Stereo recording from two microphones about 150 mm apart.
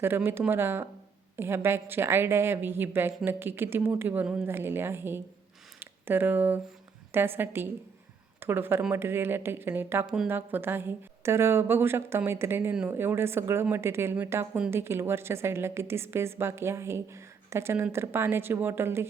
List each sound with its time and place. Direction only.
0.0 s a woman's voice: 15° right (ahead or behind)